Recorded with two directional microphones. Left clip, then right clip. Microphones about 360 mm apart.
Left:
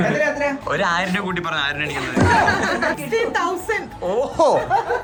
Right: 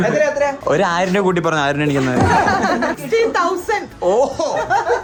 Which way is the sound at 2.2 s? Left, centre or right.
Centre.